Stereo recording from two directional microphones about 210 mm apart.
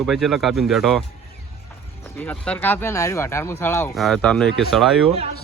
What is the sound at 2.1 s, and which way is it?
Speech, 5° left (ahead or behind).